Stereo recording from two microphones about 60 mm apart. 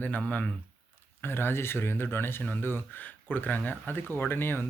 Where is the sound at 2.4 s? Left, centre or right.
Left.